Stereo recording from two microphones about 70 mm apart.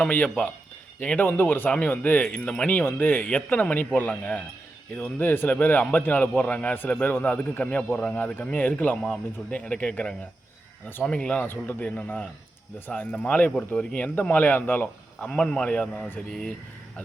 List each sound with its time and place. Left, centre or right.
0.0 s speech: left
11.4 s speech: left
15.3 s speech: centre